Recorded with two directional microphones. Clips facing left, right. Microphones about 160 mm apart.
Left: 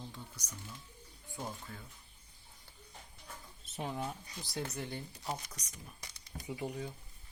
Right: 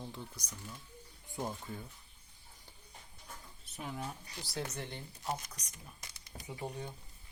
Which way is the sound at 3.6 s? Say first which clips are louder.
Left 4 dB; 25° left (ahead or behind).